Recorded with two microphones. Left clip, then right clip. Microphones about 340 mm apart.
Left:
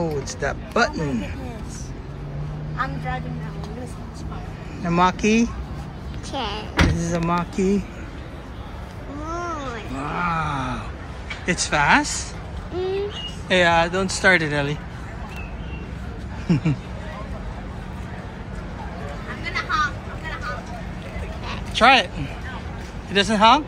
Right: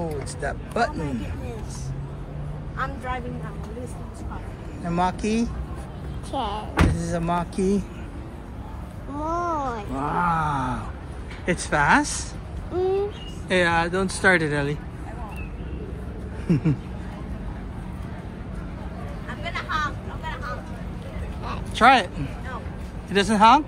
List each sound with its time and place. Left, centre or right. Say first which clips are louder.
0.0 s speech: left 4 dB; centre
4.8 s speech: left 5 dB; centre
6.3 s speech: even; centre
7.0 s speech: left 2 dB; centre
9.2 s groan: right 4 dB; centre
11.4 s speech: left 2 dB; centre
12.7 s speech: right 2 dB; centre
13.5 s speech: left 4 dB; centre
16.4 s speech: left 1 dB; centre
19.5 s a sound: left 5 dB; right
21.7 s speech: left 1 dB; centre
23.1 s speech: left 1 dB; centre